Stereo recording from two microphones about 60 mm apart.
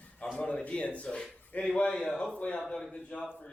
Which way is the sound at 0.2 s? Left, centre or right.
Centre.